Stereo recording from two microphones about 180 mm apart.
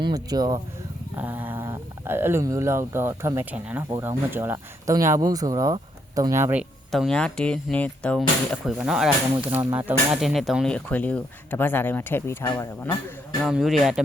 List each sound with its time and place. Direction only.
0.0 s speech: 20° right (ahead or behind)
1.1 s speech: 10° right (ahead or behind); by 13.0 s 15° left (ahead or behind)
13.4 s speech: centre (ahead or behind)